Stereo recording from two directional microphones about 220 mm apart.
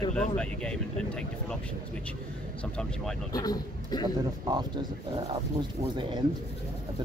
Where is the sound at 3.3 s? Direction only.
15° left (ahead or behind).